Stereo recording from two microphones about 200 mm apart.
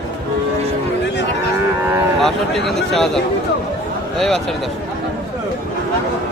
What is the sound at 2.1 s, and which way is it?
Speech, centre (ahead or behind).